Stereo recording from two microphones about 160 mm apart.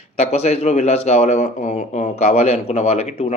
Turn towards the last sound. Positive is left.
turn(degrees=40)  # may be behind; listen again after turning